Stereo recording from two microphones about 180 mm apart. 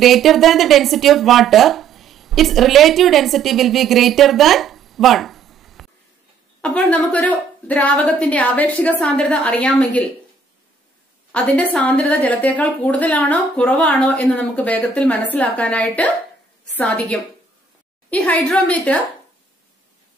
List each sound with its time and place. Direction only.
0.0 s a woman's voice: centre (ahead or behind)
11.3 s a woman's voice: 5° left (ahead or behind)